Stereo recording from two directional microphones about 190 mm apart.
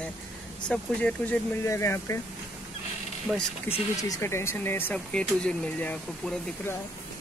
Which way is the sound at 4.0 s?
15° left (ahead or behind).